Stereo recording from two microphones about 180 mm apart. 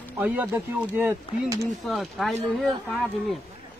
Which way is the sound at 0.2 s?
10° right (ahead or behind).